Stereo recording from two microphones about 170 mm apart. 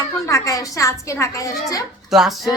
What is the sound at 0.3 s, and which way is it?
Speech, 20° left (ahead or behind).